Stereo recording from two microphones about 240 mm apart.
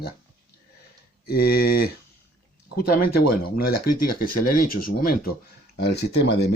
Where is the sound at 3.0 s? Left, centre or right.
Left.